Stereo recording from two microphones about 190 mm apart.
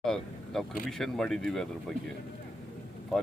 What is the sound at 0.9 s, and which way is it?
Speech, centre (ahead or behind).